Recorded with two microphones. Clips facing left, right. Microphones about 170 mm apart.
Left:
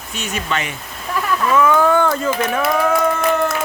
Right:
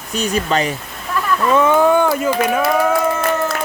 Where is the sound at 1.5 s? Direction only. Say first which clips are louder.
Right 2 dB; 25° right (ahead or behind).